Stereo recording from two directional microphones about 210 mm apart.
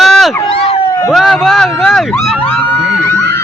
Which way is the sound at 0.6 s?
30° left (ahead or behind).